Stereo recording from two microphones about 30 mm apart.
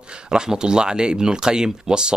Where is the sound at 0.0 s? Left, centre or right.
Right.